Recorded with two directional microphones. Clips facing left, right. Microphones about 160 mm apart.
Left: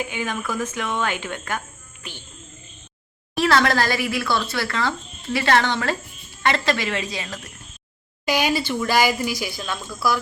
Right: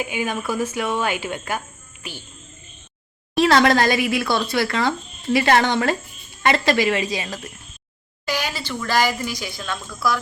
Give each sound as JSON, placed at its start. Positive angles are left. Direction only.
{"t": 0.0, "sound": "speech", "side_deg": -10}
{"t": 3.3, "sound": "speech", "side_deg": -20}
{"t": 8.2, "sound": "speech", "side_deg": 15}